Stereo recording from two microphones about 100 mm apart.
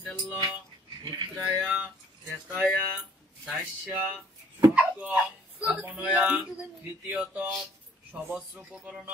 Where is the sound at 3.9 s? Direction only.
20° right (ahead or behind).